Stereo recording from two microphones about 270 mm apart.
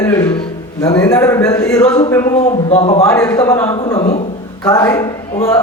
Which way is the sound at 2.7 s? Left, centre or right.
Left.